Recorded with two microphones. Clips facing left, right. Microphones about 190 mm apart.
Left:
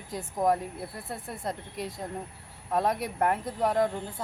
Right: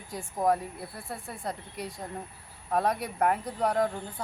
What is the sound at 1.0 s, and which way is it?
Speech, 20° left (ahead or behind).